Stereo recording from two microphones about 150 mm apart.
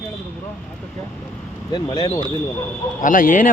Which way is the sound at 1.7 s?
30° left (ahead or behind).